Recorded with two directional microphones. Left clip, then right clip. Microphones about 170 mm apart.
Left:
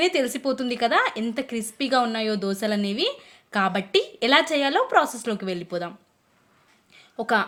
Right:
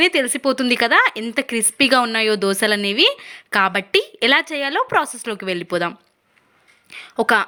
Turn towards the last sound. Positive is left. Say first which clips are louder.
# right 6 dB
turn(degrees=-30)  # may be behind; listen again after turning